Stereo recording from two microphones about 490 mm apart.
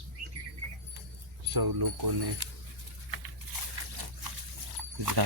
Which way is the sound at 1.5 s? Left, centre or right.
Right.